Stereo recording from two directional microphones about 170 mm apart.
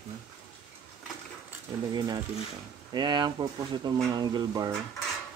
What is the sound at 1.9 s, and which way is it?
Speech, 25° right (ahead or behind).